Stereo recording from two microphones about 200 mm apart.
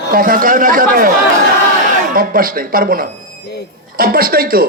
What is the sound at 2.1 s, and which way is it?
A man's voice, 45° right (ahead or behind).